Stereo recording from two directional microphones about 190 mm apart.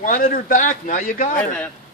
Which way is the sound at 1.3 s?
5° left (ahead or behind).